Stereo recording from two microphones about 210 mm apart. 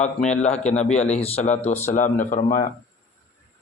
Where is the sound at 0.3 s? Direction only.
30° left (ahead or behind).